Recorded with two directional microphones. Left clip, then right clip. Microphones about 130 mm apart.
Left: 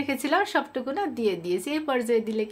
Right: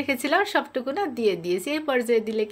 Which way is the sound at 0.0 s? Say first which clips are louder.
Right 2 dB; 20° right (ahead or behind).